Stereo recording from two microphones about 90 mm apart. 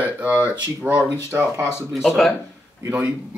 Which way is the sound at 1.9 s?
Centre (ahead or behind).